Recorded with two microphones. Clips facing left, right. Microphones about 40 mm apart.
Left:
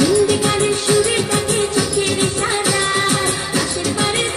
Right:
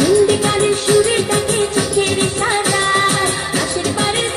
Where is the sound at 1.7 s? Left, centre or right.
Right.